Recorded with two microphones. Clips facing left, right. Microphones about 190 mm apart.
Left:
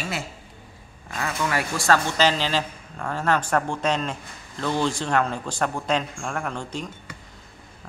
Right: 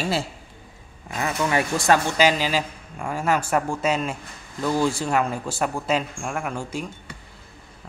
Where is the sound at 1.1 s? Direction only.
20° right (ahead or behind).